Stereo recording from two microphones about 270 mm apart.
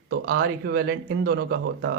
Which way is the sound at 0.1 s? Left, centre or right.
Right.